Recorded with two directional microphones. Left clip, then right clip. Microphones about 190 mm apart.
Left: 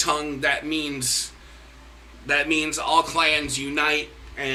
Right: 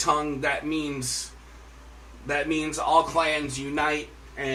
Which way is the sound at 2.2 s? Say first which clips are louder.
Left 5 dB; 15° right (ahead or behind).